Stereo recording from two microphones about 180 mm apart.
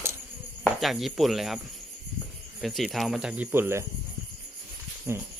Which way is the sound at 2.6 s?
Centre (ahead or behind).